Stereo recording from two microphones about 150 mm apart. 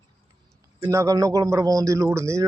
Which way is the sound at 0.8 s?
20° right (ahead or behind).